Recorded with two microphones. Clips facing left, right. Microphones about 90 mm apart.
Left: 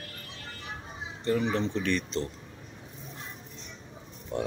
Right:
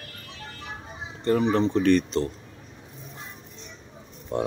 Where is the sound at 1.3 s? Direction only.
45° right (ahead or behind).